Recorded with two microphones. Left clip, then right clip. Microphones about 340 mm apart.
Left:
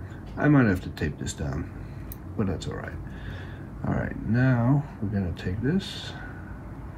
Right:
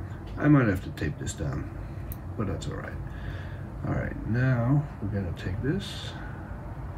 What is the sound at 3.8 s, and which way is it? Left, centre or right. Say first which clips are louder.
Speech: left 2 dB; centre.